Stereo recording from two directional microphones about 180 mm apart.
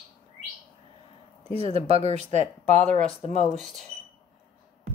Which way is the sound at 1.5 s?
35° right (ahead or behind).